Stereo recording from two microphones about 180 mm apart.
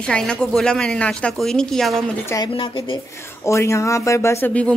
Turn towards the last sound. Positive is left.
turn(degrees=5)  # may be behind; listen again after turning